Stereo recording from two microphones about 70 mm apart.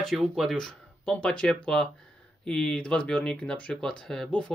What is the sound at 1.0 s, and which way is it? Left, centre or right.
Speech, centre.